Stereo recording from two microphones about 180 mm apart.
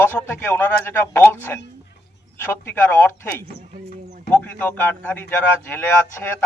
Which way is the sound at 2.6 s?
15° left (ahead or behind).